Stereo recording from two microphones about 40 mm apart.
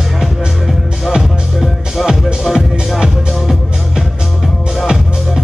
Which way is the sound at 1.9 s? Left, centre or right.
Centre.